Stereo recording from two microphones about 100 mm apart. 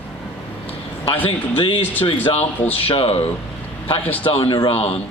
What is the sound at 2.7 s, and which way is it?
Speech, 75° left (ahead or behind).